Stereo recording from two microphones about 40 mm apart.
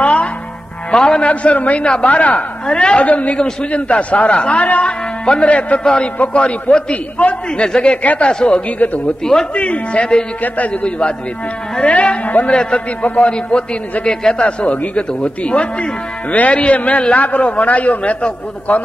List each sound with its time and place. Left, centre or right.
0.0 s music: left
0.9 s music: left
1.3 s speech: left
3.1 s a man's voice: left
8.0 s speech: left
8.3 s a man's voice: centre
8.5 s speech: left
9.2 s speech: centre
9.5 s a man's voice: left